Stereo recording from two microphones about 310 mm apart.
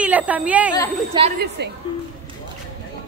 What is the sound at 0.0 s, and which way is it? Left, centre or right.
Speech, centre.